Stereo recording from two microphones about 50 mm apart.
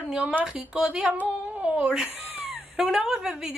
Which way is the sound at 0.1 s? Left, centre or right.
Right.